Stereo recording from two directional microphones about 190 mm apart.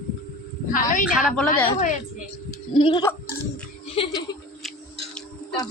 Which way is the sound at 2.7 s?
25° left (ahead or behind).